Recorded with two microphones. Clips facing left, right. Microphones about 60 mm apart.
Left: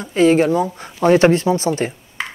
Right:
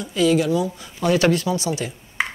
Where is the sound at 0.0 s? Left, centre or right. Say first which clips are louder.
Left 5 dB; left.